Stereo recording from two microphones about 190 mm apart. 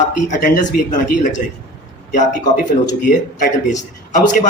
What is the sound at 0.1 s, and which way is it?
A man's voice, 45° left (ahead or behind).